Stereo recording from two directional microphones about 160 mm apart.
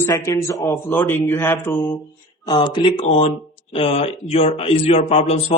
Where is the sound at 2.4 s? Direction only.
25° left (ahead or behind).